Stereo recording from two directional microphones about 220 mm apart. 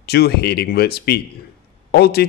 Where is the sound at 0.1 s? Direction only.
45° left (ahead or behind).